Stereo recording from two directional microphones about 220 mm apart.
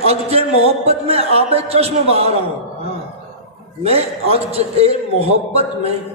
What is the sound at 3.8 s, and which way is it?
A man's voice, 25° right (ahead or behind).